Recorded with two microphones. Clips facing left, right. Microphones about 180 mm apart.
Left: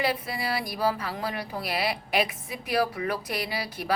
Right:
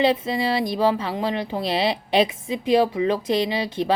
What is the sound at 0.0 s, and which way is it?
Speech, 25° right (ahead or behind).